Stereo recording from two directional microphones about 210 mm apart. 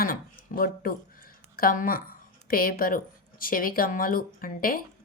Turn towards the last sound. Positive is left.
turn(degrees=45)  # may be behind; listen again after turning